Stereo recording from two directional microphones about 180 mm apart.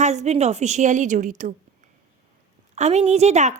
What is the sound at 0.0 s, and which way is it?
A woman's voice, 40° right (ahead or behind).